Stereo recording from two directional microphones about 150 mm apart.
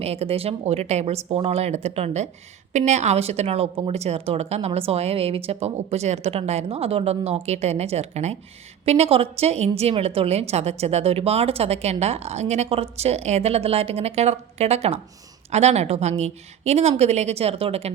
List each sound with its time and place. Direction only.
0.0 s a woman's voice: 45° right (ahead or behind)